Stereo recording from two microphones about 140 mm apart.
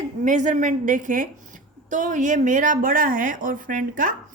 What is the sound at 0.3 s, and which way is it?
A woman's voice, 65° right (ahead or behind).